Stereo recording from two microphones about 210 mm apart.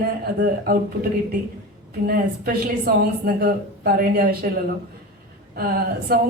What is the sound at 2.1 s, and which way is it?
Speech, 45° right (ahead or behind).